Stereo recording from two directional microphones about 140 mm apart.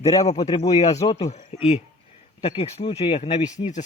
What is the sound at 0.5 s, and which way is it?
Speech, 50° left (ahead or behind).